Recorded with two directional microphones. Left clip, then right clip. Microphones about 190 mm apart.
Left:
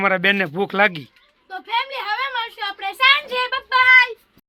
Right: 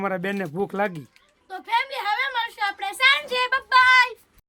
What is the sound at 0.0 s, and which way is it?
Speech, centre (ahead or behind).